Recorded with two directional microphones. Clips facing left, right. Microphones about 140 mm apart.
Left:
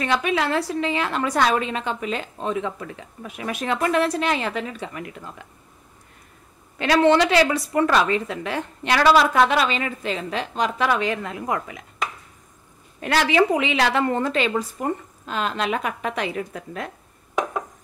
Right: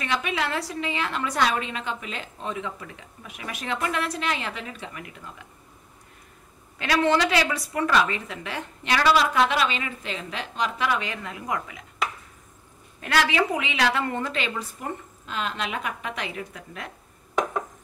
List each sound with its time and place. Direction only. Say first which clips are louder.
0.0 s a woman's voice: left 5 dB; 40° left (ahead or behind)
6.8 s a woman's voice: left 5 dB; 30° left (ahead or behind)
7.8 s a woman's voice: left 3 dB; 40° left (ahead or behind)
13.0 s a woman's voice: left 4 dB; 30° left (ahead or behind)